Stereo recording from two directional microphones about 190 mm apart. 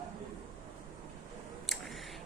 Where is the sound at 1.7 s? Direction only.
Centre (ahead or behind).